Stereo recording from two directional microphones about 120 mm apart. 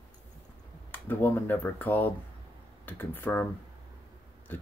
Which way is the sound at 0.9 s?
15° left (ahead or behind).